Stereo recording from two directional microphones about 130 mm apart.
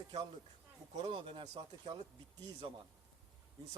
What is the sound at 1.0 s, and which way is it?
Speech, 40° right (ahead or behind).